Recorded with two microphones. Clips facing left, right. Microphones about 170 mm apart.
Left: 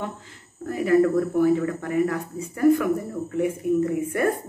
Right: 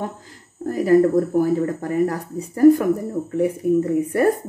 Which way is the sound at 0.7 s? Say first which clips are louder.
Right 4 dB; 40° right (ahead or behind).